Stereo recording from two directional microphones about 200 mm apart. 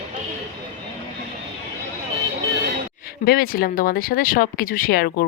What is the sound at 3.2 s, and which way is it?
Speech, 50° left (ahead or behind).